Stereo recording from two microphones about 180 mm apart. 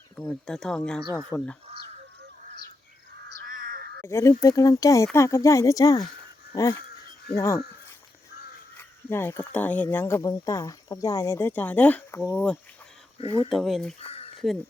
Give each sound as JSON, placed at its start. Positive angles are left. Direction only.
{"t": 0.3, "sound": "speech", "side_deg": 5}
{"t": 3.4, "sound": "crow", "side_deg": -55}
{"t": 4.0, "sound": "speech", "side_deg": 15}
{"t": 7.3, "sound": "speech", "side_deg": 15}
{"t": 8.8, "sound": "speech", "side_deg": 15}
{"t": 13.1, "sound": "speech", "side_deg": 30}
{"t": 13.5, "sound": "speech", "side_deg": 0}
{"t": 14.0, "sound": "a sound", "side_deg": 35}
{"t": 14.3, "sound": "speech", "side_deg": 0}